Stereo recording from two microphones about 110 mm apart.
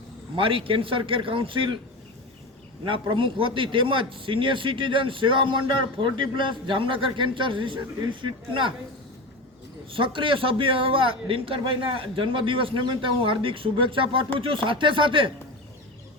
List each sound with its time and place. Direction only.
0.3 s speech: 55° right (ahead or behind)
2.8 s speech: 50° right (ahead or behind)
9.9 s speech: 50° right (ahead or behind)